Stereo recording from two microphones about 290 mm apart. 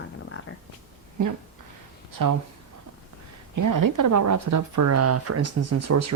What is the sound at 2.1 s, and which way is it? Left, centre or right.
Speech, right.